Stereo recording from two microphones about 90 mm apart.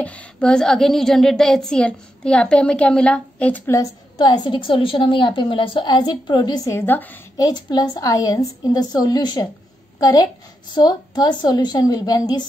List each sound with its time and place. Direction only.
0.0 s a woman's voice: 15° left (ahead or behind)
4.2 s a woman's voice: 60° left (ahead or behind)
6.7 s a woman's voice: 25° left (ahead or behind)
7.3 s a woman's voice: 45° left (ahead or behind)
10.7 s a woman's voice: 50° left (ahead or behind)